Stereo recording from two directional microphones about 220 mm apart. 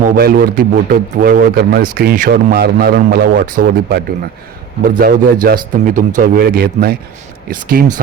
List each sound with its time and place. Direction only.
0.0 s a man's voice: 45° right (ahead or behind)